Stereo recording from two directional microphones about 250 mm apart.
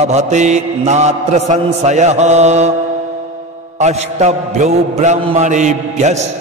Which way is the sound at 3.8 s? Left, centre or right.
Right.